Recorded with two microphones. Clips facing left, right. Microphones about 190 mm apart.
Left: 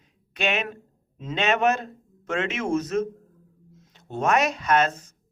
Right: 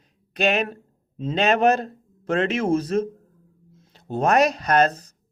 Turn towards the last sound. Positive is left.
turn(degrees=-35)  # may be behind; listen again after turning